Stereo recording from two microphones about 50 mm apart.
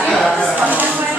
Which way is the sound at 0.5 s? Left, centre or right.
Right.